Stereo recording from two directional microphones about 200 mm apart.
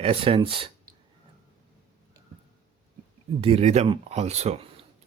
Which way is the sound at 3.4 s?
30° right (ahead or behind).